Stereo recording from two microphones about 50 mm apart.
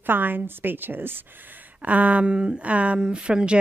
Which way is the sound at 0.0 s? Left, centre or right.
Right.